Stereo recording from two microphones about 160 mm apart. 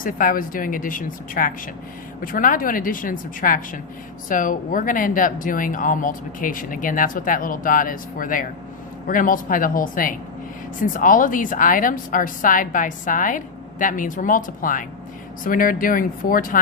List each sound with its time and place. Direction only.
0.0 s speech: 60° left (ahead or behind)